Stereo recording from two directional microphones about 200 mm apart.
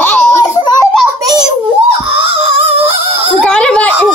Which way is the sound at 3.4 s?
5° left (ahead or behind).